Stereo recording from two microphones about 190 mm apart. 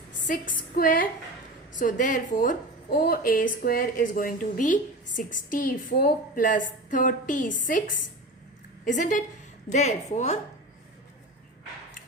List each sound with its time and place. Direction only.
0.3 s a woman's voice: 45° left (ahead or behind)
8.8 s a woman's voice: 45° left (ahead or behind)